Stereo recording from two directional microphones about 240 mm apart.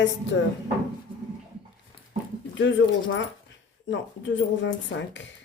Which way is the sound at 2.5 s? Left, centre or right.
Left.